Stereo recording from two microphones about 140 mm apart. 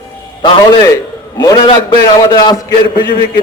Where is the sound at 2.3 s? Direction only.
30° left (ahead or behind).